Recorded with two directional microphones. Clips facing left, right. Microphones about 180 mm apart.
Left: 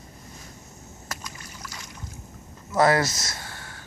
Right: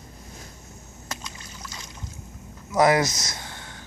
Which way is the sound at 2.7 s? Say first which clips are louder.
Right 1 dB; 15° right (ahead or behind).